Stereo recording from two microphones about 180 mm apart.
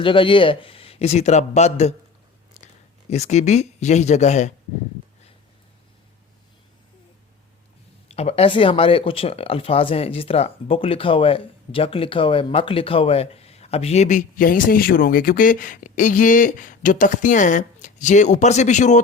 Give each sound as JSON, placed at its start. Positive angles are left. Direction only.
{"t": 0.0, "sound": "speech", "side_deg": 30}
{"t": 3.1, "sound": "speech", "side_deg": 40}
{"t": 8.0, "sound": "speech", "side_deg": 35}